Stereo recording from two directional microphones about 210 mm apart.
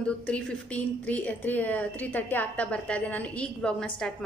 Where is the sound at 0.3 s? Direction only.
5° left (ahead or behind).